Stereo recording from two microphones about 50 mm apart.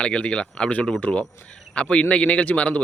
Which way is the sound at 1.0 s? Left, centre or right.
Left.